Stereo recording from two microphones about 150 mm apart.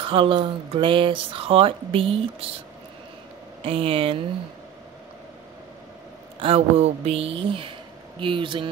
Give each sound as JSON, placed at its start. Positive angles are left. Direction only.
{"t": 0.0, "sound": "speech", "side_deg": -35}
{"t": 3.6, "sound": "speech", "side_deg": -40}
{"t": 6.4, "sound": "speech", "side_deg": -40}